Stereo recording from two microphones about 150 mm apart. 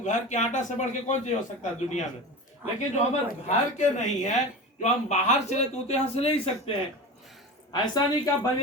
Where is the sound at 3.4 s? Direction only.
50° left (ahead or behind).